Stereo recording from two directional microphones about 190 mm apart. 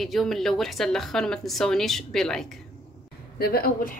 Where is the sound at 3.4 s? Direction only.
50° left (ahead or behind).